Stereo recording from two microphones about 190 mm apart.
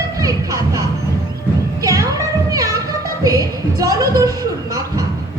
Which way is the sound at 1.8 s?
15° right (ahead or behind).